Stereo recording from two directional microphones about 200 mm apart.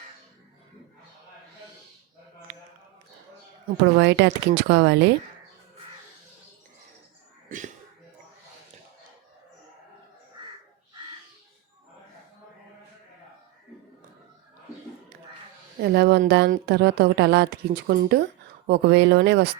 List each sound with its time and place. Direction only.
3.8 s a woman's voice: 60° right (ahead or behind)
15.8 s a woman's voice: 55° right (ahead or behind)